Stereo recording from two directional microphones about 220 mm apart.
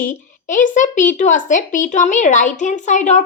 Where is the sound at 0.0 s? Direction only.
35° left (ahead or behind).